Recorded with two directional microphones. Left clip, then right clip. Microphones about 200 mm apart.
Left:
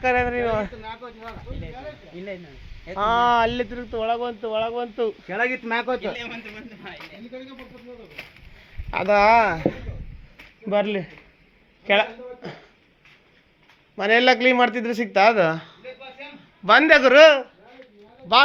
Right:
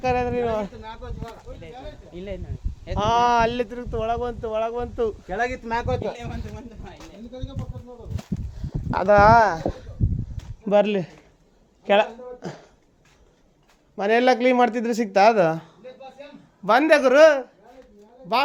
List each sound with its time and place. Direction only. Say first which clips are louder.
0.0 s speech: left 2 dB; centre (ahead or behind)
0.8 s speech: left 1 dB; 30° left (ahead or behind)
2.9 s speech: even; 15° right (ahead or behind)
3.9 s speech: left 1 dB; 10° left (ahead or behind)
8.9 s a man's voice: right 2 dB; 20° right (ahead or behind)
10.7 s speech: right 3 dB; 35° right (ahead or behind)
11.9 s a sound: right 1 dB; 30° right (ahead or behind)
13.9 s a man's voice: left 1 dB; 20° right (ahead or behind)